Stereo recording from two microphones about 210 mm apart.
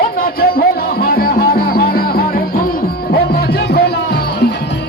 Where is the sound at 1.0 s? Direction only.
45° left (ahead or behind).